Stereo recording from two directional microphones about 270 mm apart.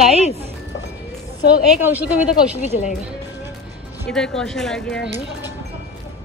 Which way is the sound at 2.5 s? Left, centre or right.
Left.